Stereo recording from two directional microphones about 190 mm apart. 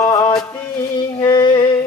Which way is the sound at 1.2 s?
20° left (ahead or behind).